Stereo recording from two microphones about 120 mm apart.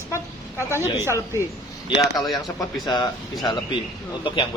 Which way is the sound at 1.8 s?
35° left (ahead or behind).